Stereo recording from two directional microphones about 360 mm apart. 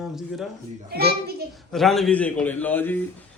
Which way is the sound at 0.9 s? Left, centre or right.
Right.